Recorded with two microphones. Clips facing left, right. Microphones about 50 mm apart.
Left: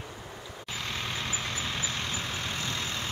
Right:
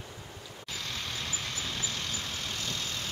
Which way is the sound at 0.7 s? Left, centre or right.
Left.